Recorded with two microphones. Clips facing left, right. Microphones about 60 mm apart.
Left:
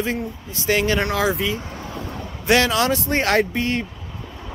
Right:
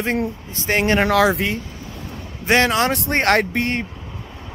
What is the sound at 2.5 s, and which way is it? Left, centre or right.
A man's voice, right.